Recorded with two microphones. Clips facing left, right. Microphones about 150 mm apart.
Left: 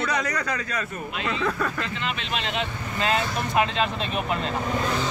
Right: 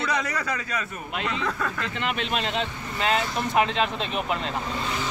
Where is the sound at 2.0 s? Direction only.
55° right (ahead or behind).